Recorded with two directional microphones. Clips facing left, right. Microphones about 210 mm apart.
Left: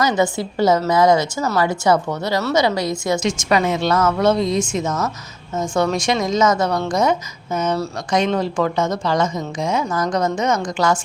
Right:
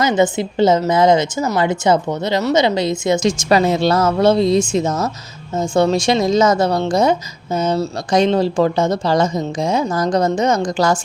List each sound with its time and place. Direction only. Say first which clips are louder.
0.0 s a woman's voice: right 3 dB; 20° right (ahead or behind)
3.2 s a woman's voice: right 4 dB; 35° right (ahead or behind)